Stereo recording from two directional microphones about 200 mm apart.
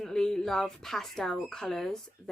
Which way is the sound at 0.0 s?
5° left (ahead or behind).